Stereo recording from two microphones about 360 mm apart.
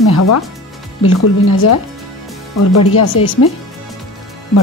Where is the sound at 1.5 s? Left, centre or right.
Left.